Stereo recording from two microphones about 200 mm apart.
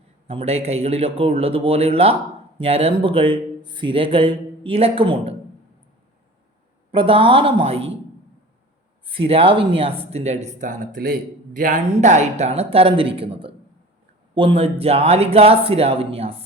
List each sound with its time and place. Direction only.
0.3 s speech: 30° right (ahead or behind)
6.9 s speech: 25° right (ahead or behind)
9.0 s speech: 25° right (ahead or behind)